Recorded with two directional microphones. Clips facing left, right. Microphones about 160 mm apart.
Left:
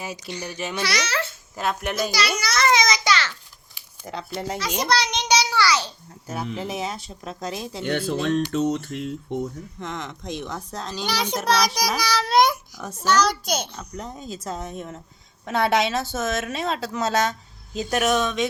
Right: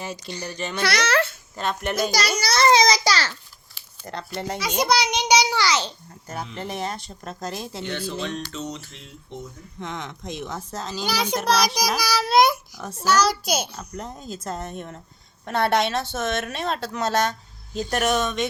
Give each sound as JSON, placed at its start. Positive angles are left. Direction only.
{"t": 0.4, "sound": "a child's voice", "side_deg": 5}
{"t": 0.8, "sound": "a child's voice", "side_deg": -55}
{"t": 1.5, "sound": "a child's voice", "side_deg": 5}
{"t": 2.4, "sound": "a sound", "side_deg": -35}
{"t": 4.0, "sound": "a child's voice", "side_deg": 0}
{"t": 4.8, "sound": "a sound", "side_deg": -10}
{"t": 6.2, "sound": "a child's voice", "side_deg": 0}
{"t": 7.9, "sound": "speech", "side_deg": 55}
{"t": 9.8, "sound": "a child's voice", "side_deg": 0}